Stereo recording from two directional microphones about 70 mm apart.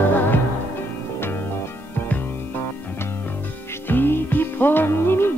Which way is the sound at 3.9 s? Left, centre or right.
Left.